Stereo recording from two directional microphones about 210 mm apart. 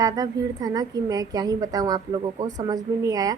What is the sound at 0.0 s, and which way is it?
A woman's voice, 15° right (ahead or behind).